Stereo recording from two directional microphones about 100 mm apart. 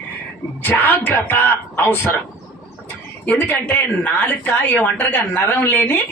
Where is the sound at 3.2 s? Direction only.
15° left (ahead or behind).